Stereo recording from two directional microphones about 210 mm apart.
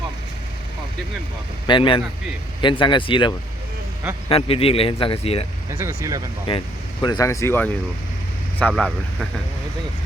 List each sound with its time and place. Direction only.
1.6 s speech: 25° left (ahead or behind)
5.7 s speech: 15° right (ahead or behind)
7.0 s speech: 20° left (ahead or behind)